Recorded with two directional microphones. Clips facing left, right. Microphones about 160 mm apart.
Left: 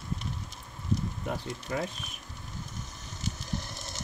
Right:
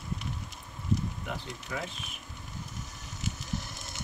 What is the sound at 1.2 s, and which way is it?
Speech, 45° left (ahead or behind).